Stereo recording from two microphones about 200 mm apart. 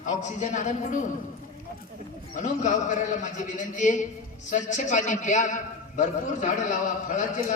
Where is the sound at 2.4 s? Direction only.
40° left (ahead or behind).